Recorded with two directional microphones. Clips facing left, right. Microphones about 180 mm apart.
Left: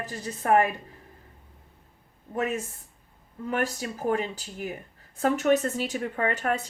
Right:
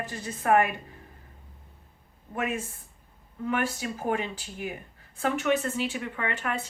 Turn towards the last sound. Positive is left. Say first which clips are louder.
# left 5 dB
turn(degrees=40)  # may be behind; listen again after turning